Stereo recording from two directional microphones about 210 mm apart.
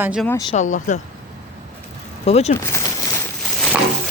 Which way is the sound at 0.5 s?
35° left (ahead or behind).